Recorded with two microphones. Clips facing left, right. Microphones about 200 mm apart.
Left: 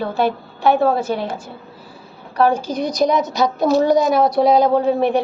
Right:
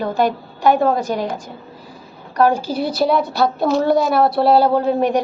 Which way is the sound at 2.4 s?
10° right (ahead or behind).